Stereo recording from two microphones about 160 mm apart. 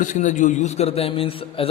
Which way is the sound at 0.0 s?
50° left (ahead or behind).